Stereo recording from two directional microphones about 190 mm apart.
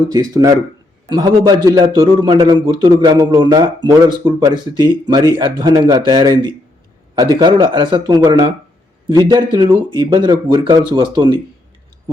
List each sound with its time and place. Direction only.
0.1 s a man's voice: 20° right (ahead or behind)